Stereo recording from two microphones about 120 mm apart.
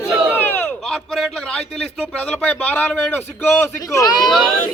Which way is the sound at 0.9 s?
Centre (ahead or behind).